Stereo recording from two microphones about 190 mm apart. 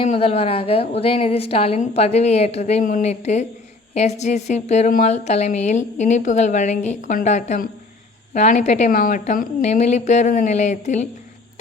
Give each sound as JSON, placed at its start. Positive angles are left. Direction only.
{"t": 0.0, "sound": "a woman's voice", "side_deg": 30}